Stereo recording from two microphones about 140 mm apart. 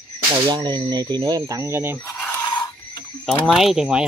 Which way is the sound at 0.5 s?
30° right (ahead or behind).